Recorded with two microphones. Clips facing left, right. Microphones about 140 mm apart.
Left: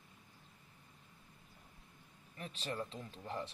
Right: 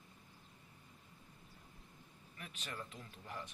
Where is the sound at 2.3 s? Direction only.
35° left (ahead or behind).